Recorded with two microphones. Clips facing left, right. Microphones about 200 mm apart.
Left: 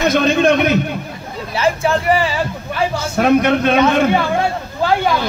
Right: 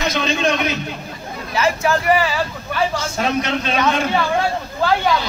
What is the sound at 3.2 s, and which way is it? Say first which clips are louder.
Speech: left 9 dB; 55° left (ahead or behind).